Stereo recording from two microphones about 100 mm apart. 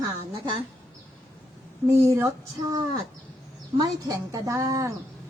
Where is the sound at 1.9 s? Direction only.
30° right (ahead or behind).